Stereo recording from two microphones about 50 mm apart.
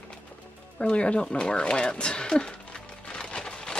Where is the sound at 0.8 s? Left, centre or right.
Left.